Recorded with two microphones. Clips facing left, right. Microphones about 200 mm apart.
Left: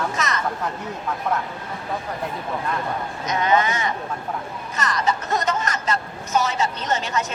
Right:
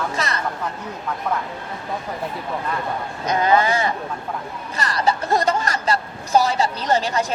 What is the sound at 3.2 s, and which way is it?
Speech, 35° right (ahead or behind).